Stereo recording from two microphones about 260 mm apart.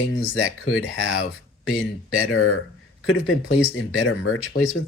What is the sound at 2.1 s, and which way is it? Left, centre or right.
Speech, left.